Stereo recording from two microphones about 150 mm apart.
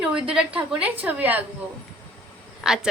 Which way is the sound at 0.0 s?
5° right (ahead or behind).